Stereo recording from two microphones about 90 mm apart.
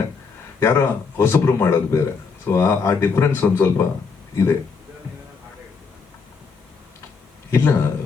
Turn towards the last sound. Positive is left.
turn(degrees=30)  # may be behind; listen again after turning